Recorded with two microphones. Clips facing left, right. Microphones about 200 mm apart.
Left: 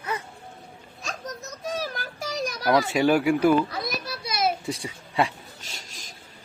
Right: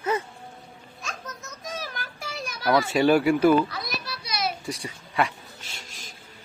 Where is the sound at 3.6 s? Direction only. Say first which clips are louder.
Left 3 dB; 45° left (ahead or behind).